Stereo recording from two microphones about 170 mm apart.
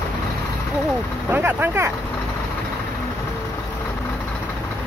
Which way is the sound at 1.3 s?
10° right (ahead or behind).